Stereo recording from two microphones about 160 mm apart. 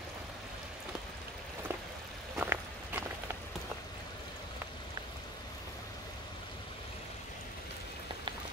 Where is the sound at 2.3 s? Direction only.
10° right (ahead or behind).